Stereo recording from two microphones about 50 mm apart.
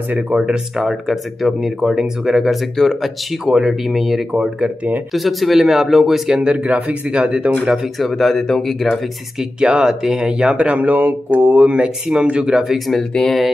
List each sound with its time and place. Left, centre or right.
0.1 s speech: right
2.8 s speech: centre
3.4 s speech: centre
3.8 s speech: centre
4.3 s speech: centre
5.1 s speech: centre
6.4 s speech: right
8.0 s speech: centre
9.6 s speech: centre
10.5 s speech: right
11.7 s speech: right
12.7 s speech: centre